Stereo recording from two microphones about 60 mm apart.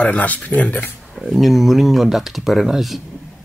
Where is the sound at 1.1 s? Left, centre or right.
Centre.